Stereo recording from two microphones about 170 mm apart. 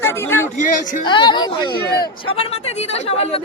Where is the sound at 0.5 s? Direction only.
50° left (ahead or behind).